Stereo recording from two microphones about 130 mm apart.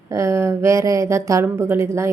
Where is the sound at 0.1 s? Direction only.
25° right (ahead or behind).